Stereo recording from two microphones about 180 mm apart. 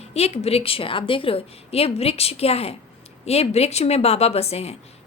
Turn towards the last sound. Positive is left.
turn(degrees=35)  # may be behind; listen again after turning